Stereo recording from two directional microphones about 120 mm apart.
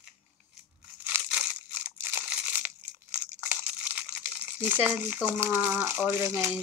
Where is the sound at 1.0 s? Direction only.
10° right (ahead or behind).